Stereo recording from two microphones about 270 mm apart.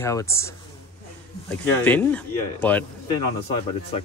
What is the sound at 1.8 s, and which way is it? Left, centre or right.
Speech, centre.